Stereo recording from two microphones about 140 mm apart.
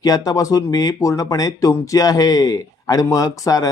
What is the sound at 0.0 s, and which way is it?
Speech, 25° left (ahead or behind).